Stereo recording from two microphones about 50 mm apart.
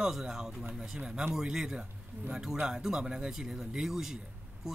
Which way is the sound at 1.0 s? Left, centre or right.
Right.